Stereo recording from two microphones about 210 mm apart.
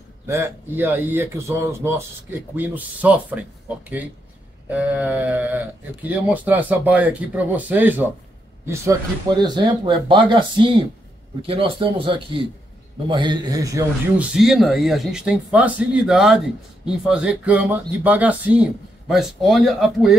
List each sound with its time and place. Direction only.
0.3 s speech: 10° right (ahead or behind)
9.4 s speech: 20° right (ahead or behind)
14.3 s speech: centre (ahead or behind)